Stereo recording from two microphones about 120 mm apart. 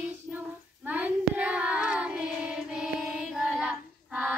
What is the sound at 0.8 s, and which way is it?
Child singing, 15° right (ahead or behind).